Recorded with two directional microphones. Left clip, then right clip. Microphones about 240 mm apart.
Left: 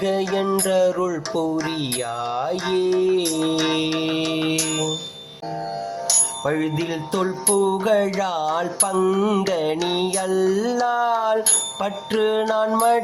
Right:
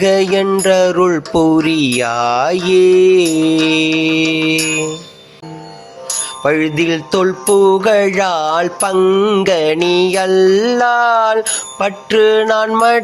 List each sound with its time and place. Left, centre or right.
0.0 s music: right
6.4 s music: centre